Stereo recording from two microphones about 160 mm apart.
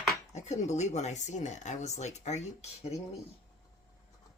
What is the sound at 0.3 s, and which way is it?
Speech, 45° left (ahead or behind).